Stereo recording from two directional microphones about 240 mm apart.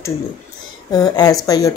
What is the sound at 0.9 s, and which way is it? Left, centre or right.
Speech, centre.